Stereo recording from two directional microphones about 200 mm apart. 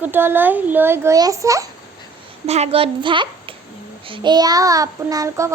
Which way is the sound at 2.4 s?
30° right (ahead or behind).